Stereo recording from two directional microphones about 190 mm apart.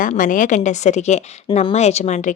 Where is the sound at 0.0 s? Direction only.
45° left (ahead or behind).